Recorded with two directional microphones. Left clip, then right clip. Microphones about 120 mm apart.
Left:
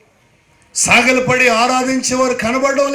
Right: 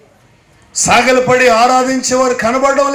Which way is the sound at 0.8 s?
20° left (ahead or behind).